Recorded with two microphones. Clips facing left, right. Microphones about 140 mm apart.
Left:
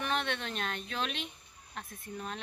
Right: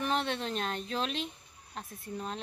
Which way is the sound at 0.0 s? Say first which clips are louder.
Right 2 dB; 35° right (ahead or behind).